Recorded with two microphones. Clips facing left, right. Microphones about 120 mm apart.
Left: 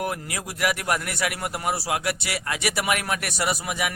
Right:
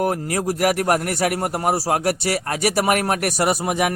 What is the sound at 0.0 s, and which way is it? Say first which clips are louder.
A man's voice: right 8 dB; 40° right (ahead or behind).